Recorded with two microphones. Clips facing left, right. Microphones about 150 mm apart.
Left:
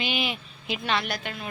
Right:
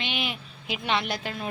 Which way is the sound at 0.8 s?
20° right (ahead or behind).